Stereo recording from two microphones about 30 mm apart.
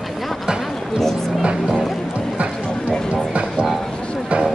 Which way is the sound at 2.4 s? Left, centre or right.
Right.